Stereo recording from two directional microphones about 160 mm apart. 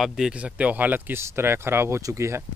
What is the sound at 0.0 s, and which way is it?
Speech, 5° right (ahead or behind).